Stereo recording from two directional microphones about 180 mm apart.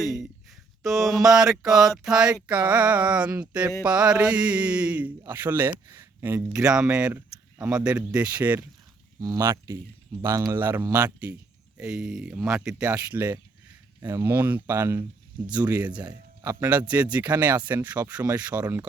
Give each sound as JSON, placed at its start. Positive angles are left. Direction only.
{"t": 0.0, "sound": "speech", "side_deg": 0}
{"t": 12.9, "sound": "speech", "side_deg": -15}
{"t": 16.9, "sound": "speech", "side_deg": -10}